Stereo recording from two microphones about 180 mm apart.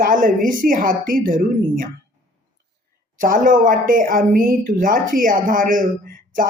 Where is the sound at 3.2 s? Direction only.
50° right (ahead or behind).